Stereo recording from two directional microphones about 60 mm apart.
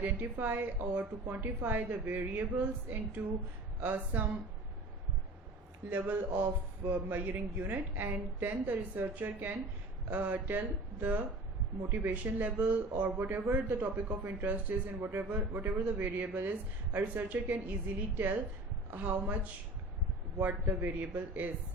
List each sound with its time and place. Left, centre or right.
0.0 s a woman's voice: right
5.9 s a woman's voice: right
11.8 s speech: right
12.1 s a woman's voice: right
20.4 s a woman's voice: right